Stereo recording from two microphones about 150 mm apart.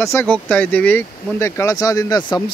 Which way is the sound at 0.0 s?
20° left (ahead or behind).